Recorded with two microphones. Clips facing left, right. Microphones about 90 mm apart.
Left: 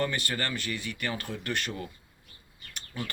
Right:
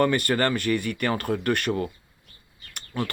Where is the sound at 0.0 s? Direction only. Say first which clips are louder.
Right 9 dB; 50° right (ahead or behind).